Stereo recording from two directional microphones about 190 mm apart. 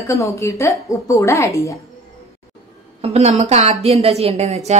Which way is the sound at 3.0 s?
35° right (ahead or behind).